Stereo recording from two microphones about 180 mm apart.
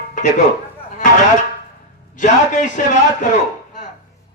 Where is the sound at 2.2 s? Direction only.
45° left (ahead or behind).